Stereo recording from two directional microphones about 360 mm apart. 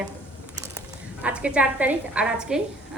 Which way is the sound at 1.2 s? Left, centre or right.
Centre.